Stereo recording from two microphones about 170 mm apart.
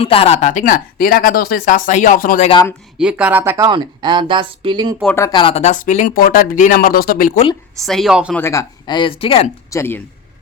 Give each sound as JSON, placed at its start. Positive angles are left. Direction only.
{"t": 0.0, "sound": "speech", "side_deg": 35}
{"t": 3.0, "sound": "speech", "side_deg": -5}
{"t": 3.7, "sound": "speech", "side_deg": -25}
{"t": 5.1, "sound": "speech", "side_deg": 20}
{"t": 5.4, "sound": "speech", "side_deg": 35}
{"t": 7.9, "sound": "speech", "side_deg": 0}
{"t": 8.4, "sound": "speech", "side_deg": 15}
{"t": 9.6, "sound": "speech", "side_deg": 15}